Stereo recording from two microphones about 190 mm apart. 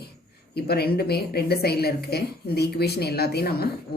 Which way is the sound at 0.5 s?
55° left (ahead or behind).